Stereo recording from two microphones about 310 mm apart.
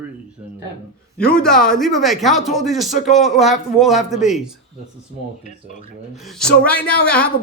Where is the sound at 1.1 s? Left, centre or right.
Centre.